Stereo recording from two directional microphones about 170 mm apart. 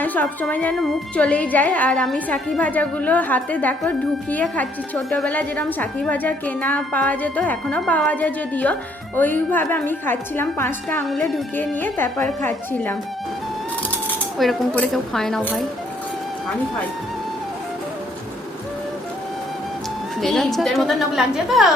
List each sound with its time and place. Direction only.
0.0 s a woman's voice: 10° left (ahead or behind)
11.0 s a woman's voice: centre (ahead or behind)
11.5 s a woman's voice: 10° left (ahead or behind)
14.3 s a woman's voice: centre (ahead or behind)
20.2 s a woman's voice: centre (ahead or behind)